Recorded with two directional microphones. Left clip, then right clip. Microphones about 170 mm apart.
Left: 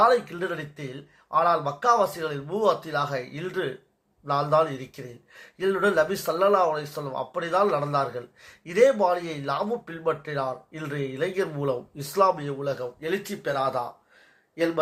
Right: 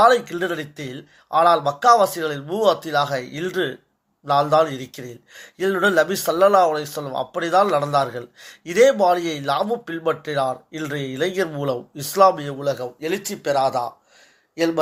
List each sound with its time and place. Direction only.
0.0 s speech: 25° right (ahead or behind)